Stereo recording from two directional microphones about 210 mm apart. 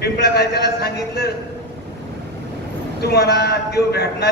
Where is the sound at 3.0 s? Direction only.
50° left (ahead or behind).